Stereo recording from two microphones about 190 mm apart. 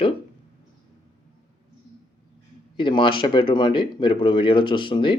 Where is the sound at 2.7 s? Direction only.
25° left (ahead or behind).